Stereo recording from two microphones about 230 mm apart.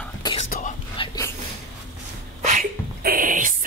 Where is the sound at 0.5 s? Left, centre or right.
Left.